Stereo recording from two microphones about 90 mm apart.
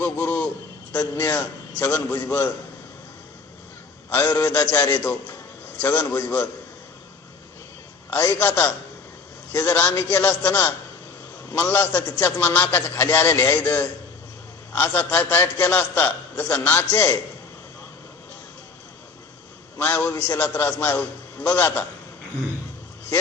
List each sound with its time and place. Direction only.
0.0 s a sound: 15° left (ahead or behind)
1.1 s a man's voice: 25° left (ahead or behind)
4.4 s a man's voice: 20° left (ahead or behind)
8.1 s a man's voice: 25° left (ahead or behind)
19.8 s a man's voice: 20° left (ahead or behind)